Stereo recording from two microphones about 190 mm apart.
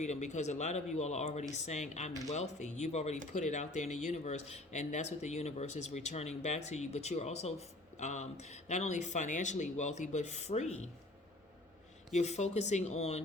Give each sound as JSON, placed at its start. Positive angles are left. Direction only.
{"t": 0.0, "sound": "speech", "side_deg": 40}
{"t": 12.1, "sound": "speech", "side_deg": 35}